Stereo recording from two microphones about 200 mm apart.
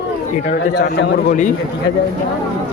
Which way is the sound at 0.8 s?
55° left (ahead or behind).